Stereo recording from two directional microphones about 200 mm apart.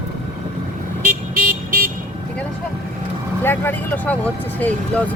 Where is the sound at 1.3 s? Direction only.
45° right (ahead or behind).